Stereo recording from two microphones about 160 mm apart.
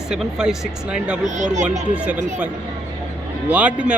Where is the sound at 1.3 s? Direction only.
50° right (ahead or behind).